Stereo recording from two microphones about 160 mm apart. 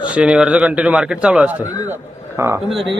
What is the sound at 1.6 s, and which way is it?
Speech, 20° left (ahead or behind).